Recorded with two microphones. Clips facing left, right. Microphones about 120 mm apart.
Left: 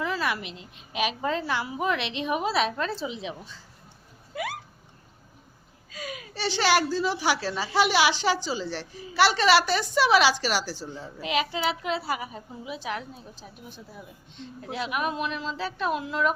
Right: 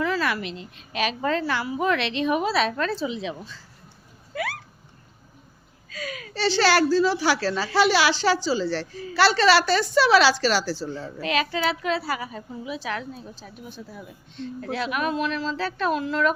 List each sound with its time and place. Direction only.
0.0 s a woman's voice: 15° left (ahead or behind)
5.9 s a sound: 90° right
6.3 s a woman's voice: 15° left (ahead or behind)